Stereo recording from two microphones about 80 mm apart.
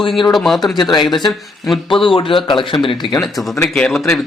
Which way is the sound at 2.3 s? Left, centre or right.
Left.